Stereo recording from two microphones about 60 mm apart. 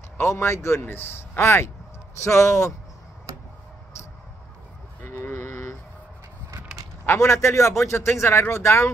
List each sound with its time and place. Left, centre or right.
0.2 s speech: left
5.0 s livestock: left
7.2 s speech: left